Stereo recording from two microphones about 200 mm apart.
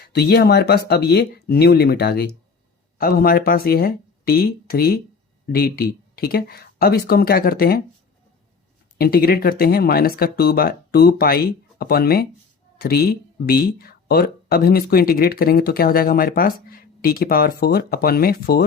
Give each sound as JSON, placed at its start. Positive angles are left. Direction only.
{"t": 0.0, "sound": "speech", "side_deg": 55}
{"t": 9.0, "sound": "speech", "side_deg": 50}